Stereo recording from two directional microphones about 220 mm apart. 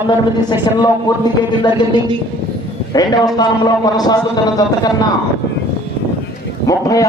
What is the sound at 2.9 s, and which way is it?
A man's voice, 15° left (ahead or behind).